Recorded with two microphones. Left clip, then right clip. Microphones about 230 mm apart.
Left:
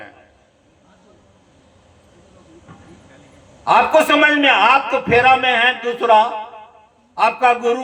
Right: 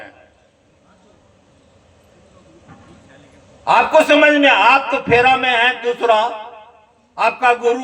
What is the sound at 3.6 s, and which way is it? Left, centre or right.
A man's voice, right.